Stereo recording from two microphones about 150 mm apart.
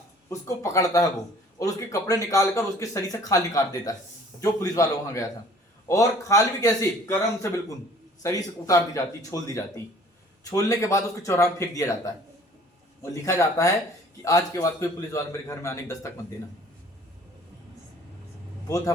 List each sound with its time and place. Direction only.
0.3 s speech: 20° left (ahead or behind)
8.2 s speech: 20° left (ahead or behind)
13.0 s speech: 20° left (ahead or behind)